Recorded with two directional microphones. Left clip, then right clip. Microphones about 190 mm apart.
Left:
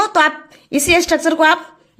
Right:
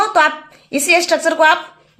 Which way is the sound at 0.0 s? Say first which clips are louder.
Right 1 dB; 25° left (ahead or behind).